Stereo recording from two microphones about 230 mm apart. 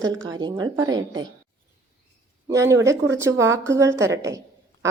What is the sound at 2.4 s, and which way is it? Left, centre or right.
A woman's voice, centre.